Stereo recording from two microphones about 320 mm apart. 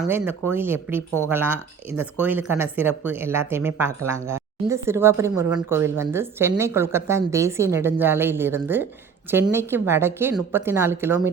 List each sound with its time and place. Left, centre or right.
0.0 s speech: centre